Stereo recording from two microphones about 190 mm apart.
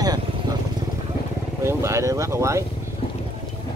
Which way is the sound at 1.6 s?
15° right (ahead or behind).